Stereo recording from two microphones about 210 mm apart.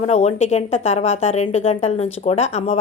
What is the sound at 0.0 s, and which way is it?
Speech, 30° left (ahead or behind).